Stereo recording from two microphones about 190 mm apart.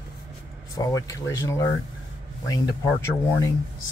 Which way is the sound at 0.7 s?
15° left (ahead or behind).